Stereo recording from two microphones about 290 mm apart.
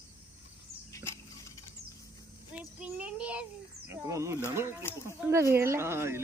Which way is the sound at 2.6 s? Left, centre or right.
Centre.